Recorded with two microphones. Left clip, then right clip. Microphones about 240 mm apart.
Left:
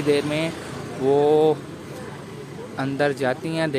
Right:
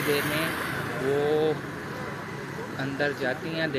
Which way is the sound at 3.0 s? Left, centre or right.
Left.